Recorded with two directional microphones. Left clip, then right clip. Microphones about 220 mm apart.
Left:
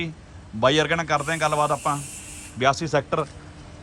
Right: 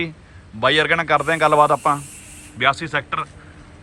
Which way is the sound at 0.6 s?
15° left (ahead or behind).